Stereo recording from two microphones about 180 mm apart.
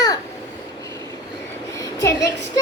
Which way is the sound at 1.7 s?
15° left (ahead or behind).